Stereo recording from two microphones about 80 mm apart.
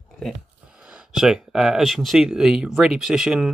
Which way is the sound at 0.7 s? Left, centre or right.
Centre.